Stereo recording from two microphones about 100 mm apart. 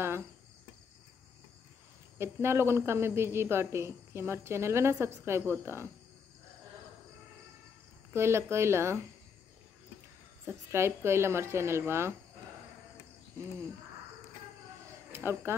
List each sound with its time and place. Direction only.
2.1 s speech: 25° right (ahead or behind)
8.1 s speech: 25° right (ahead or behind)
10.4 s speech: 25° right (ahead or behind)
15.1 s speech: 25° right (ahead or behind)